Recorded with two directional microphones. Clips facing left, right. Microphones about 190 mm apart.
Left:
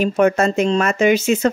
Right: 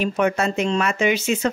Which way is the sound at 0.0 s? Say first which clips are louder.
Left 5 dB; 45° left (ahead or behind).